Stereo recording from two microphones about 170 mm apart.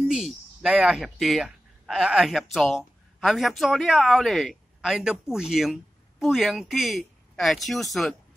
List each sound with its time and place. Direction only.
0.0 s speech: centre (ahead or behind)